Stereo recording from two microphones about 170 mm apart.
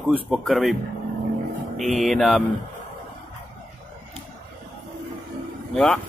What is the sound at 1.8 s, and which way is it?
Speech, centre (ahead or behind).